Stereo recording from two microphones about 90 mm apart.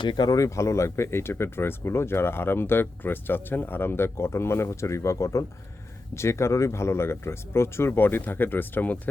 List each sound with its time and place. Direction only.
0.0 s speech: 60° left (ahead or behind)
0.3 s speech: 35° left (ahead or behind); by 9.0 s 20° left (ahead or behind)